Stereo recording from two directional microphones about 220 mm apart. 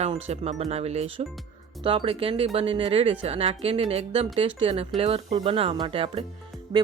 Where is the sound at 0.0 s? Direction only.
25° right (ahead or behind).